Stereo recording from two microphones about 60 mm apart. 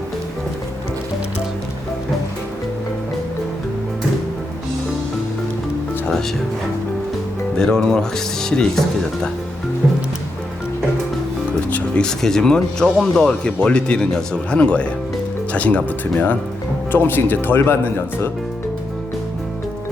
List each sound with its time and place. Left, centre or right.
7.5 s speech: centre
11.7 s speech: centre
16.9 s speech: left